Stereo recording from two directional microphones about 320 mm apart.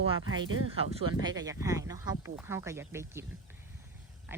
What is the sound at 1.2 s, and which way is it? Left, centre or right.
Speech, centre.